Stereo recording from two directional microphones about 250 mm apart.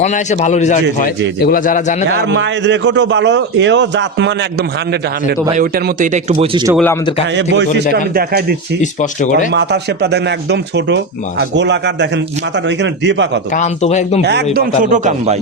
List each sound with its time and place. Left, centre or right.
0.0 s a man's voice: left
2.0 s speech: right
5.5 s speech: right
7.3 s a man's voice: right
8.8 s a man's voice: left
9.5 s speech: right
13.5 s a man's voice: left
14.2 s a man's voice: right
14.5 s speech: right